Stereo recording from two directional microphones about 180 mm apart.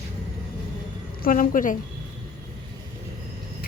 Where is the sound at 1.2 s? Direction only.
50° left (ahead or behind).